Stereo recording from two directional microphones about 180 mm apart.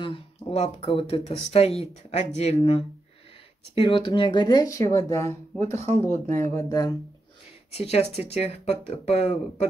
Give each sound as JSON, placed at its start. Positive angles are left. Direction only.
{"t": 0.0, "sound": "speech", "side_deg": 35}
{"t": 5.7, "sound": "speech", "side_deg": -40}
{"t": 6.4, "sound": "speech", "side_deg": 20}
{"t": 7.7, "sound": "speech", "side_deg": 35}